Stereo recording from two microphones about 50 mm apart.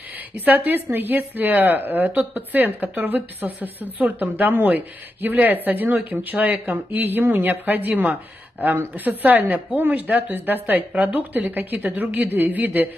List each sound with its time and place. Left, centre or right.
0.5 s a woman's voice: right
10.9 s speech: right
11.1 s a woman's voice: right